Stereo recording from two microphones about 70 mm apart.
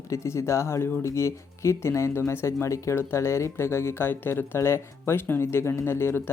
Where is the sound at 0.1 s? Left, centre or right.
Left.